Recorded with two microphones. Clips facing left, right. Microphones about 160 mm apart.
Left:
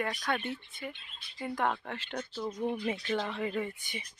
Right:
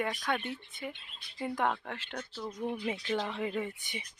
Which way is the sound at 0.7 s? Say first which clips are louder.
Right 1 dB; 20° right (ahead or behind).